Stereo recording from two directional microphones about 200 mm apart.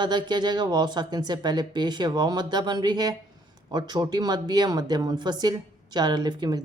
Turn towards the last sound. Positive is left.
turn(degrees=-20)  # may be behind; listen again after turning